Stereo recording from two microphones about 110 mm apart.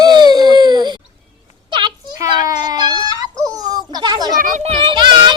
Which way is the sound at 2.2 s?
35° right (ahead or behind).